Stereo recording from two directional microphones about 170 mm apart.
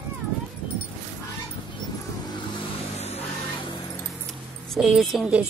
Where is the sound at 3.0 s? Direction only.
35° left (ahead or behind).